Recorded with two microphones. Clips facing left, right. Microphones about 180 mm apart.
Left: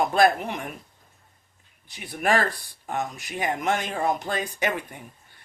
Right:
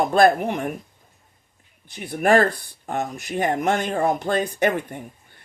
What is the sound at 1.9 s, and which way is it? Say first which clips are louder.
Speech: right 6 dB; 50° right (ahead or behind).